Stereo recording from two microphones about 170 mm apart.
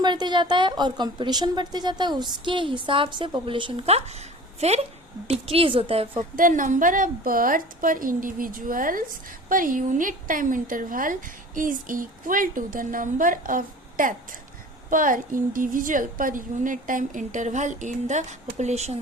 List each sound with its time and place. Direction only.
0.0 s a woman's voice: 25° right (ahead or behind)
6.3 s a woman's voice: 50° right (ahead or behind)